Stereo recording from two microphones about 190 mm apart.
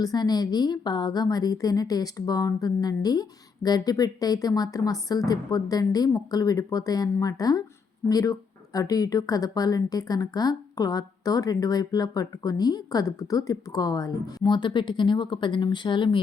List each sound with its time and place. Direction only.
0.0 s speech: 20° left (ahead or behind)